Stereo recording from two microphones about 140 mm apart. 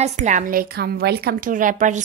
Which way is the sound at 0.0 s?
60° right (ahead or behind).